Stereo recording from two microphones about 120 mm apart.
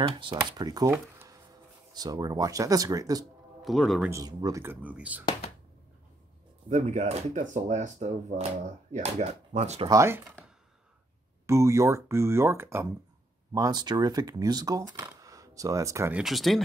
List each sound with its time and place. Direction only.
0.0 s speech: 45° right (ahead or behind)
0.5 s speech: 35° right (ahead or behind)
0.8 s a sound: 20° right (ahead or behind)
2.0 s speech: 35° right (ahead or behind)
3.6 s speech: centre (ahead or behind)
4.1 s speech: 30° right (ahead or behind)
4.6 s speech: 10° right (ahead or behind)
6.7 s speech: 75° right (ahead or behind)
9.8 s speech: 25° right (ahead or behind)
11.4 s speech: 25° right (ahead or behind)
13.5 s speech: 30° right (ahead or behind)
16.1 s speech: 5° right (ahead or behind)